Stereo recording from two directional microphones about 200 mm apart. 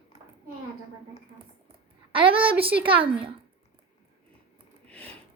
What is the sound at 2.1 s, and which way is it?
Speech, 25° right (ahead or behind).